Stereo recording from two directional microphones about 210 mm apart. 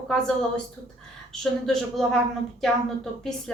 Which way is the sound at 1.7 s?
Centre (ahead or behind).